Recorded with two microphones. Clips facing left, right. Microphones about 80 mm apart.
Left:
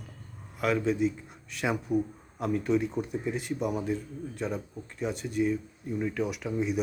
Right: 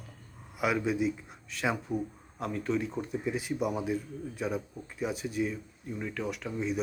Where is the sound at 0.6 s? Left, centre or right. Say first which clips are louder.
Left 2 dB; centre.